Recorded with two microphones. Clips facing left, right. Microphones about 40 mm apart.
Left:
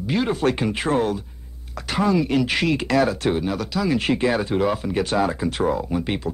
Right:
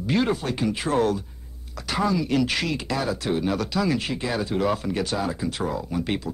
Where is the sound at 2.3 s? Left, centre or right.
Left.